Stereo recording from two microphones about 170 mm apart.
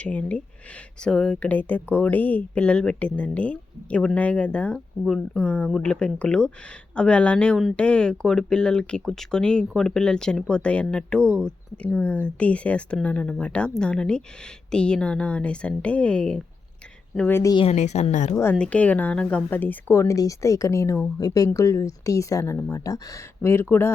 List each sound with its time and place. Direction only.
0.0 s speech: 10° left (ahead or behind)
17.5 s speech: 30° left (ahead or behind)
17.7 s speech: 40° left (ahead or behind)
18.5 s speech: 5° left (ahead or behind)